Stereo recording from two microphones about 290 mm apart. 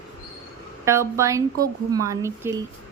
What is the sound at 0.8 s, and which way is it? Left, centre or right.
Speech, centre.